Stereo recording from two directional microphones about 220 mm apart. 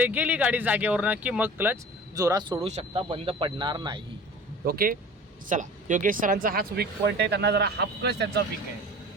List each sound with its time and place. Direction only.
0.0 s speech: 5° right (ahead or behind)
2.6 s speech: 25° right (ahead or behind)
4.6 s speech: 45° right (ahead or behind)